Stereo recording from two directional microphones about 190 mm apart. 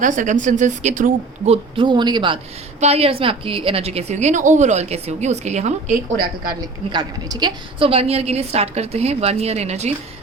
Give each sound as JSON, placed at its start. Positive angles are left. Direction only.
{"t": 0.0, "sound": "a woman's voice", "side_deg": -40}
{"t": 1.7, "sound": "a woman's voice", "side_deg": -25}
{"t": 6.1, "sound": "a woman's voice", "side_deg": -50}
{"t": 6.9, "sound": "a woman's voice", "side_deg": -20}